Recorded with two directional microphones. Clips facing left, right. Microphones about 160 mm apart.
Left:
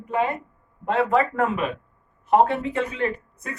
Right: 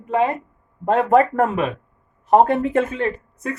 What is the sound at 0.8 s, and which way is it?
Speech, 45° right (ahead or behind).